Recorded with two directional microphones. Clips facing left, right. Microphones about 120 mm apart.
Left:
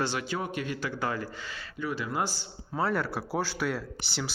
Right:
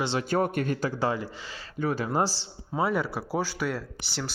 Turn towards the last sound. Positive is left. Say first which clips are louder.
# even
turn(degrees=0)  # may be behind; listen again after turning